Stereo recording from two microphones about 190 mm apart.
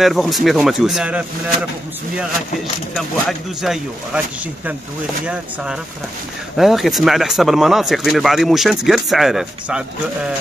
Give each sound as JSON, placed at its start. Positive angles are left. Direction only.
{"t": 0.0, "sound": "speech", "side_deg": 0}
{"t": 3.0, "sound": "speech", "side_deg": 0}
{"t": 5.2, "sound": "speech", "side_deg": -5}